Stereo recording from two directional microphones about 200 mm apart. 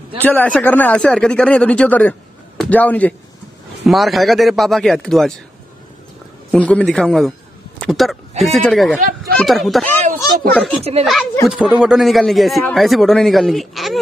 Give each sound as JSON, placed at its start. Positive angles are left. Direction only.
{"t": 0.2, "sound": "speech", "side_deg": 10}
{"t": 6.5, "sound": "speech", "side_deg": 5}
{"t": 10.8, "sound": "speech", "side_deg": -30}
{"t": 11.4, "sound": "speech", "side_deg": -5}